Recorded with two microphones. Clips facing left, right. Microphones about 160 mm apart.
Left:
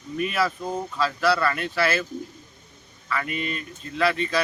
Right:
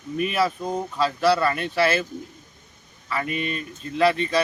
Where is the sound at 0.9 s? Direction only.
25° right (ahead or behind).